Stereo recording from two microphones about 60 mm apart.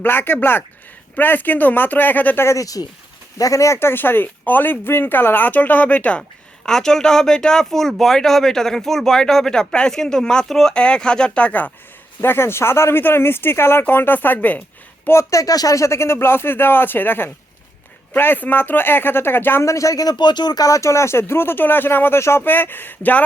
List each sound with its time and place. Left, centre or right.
0.0 s speech: left
2.6 s speech: left
3.8 s speech: left
6.7 s speech: centre; by 11.7 s left
12.2 s speech: left
15.1 s speech: left
19.6 s speech: left
20.6 s speech: left
22.4 s speech: left